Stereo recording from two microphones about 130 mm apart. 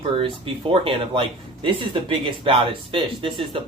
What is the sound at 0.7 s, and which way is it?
Speech, 45° right (ahead or behind).